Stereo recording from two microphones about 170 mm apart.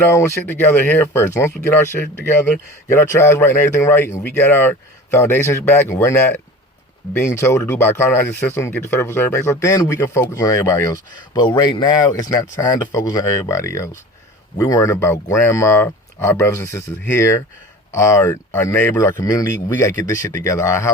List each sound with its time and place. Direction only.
0.0 s speech: 15° left (ahead or behind)